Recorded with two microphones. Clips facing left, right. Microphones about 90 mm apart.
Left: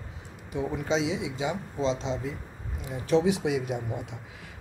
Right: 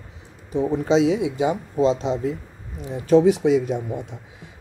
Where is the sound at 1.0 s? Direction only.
50° right (ahead or behind).